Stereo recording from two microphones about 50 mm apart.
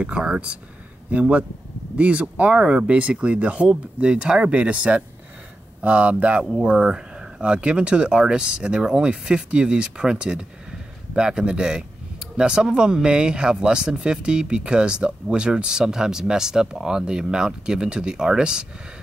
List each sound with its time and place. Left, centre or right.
0.0 s speech: centre
6.5 s speech: centre